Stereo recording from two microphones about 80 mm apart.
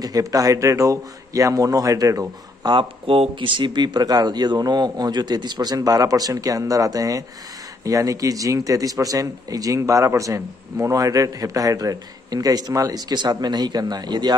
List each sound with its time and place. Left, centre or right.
0.0 s a man's voice: right
3.3 s a man's voice: right